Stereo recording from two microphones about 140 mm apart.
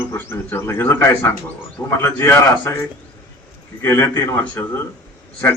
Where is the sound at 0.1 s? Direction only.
15° left (ahead or behind).